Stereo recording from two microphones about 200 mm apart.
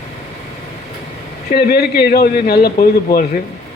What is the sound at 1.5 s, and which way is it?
Speech, 55° left (ahead or behind).